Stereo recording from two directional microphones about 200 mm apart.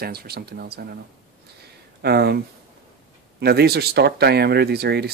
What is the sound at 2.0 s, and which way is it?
Speech, 50° right (ahead or behind).